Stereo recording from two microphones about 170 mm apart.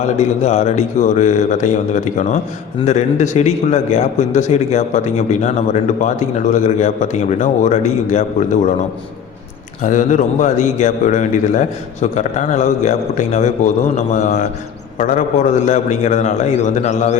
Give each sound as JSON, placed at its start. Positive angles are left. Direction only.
{"t": 0.4, "sound": "a man's voice", "side_deg": 40}
{"t": 9.8, "sound": "a man's voice", "side_deg": 50}